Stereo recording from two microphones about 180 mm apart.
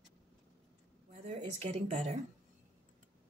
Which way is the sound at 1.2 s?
35° right (ahead or behind).